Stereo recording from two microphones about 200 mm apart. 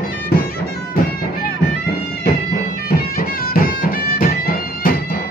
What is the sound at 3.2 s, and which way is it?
Music, 45° left (ahead or behind).